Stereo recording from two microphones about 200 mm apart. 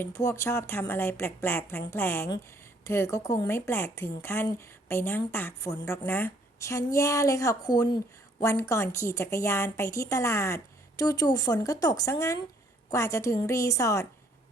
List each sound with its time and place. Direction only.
0.0 s speech: 15° left (ahead or behind)